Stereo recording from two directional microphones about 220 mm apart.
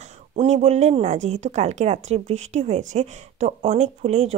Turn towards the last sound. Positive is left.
turn(degrees=-30)  # may be behind; listen again after turning